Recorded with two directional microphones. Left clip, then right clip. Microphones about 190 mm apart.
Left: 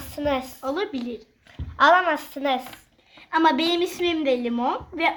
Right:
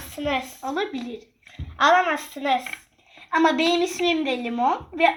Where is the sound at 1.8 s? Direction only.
35° left (ahead or behind).